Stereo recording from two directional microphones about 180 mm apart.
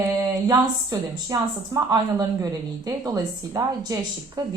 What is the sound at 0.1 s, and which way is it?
A woman's voice, 20° right (ahead or behind).